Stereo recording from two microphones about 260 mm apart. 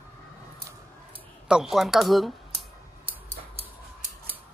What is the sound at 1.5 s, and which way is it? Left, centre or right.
Clicking, centre.